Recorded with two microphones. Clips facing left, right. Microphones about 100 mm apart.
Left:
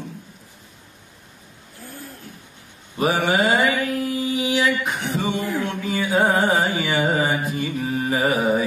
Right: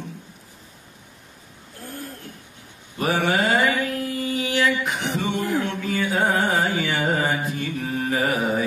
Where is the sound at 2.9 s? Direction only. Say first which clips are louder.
Left 2 dB; 15° left (ahead or behind).